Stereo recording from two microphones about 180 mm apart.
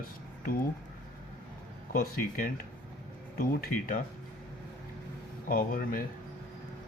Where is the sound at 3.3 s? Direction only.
55° left (ahead or behind).